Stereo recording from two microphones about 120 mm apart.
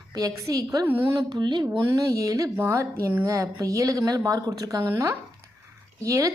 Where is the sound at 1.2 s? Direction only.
35° right (ahead or behind).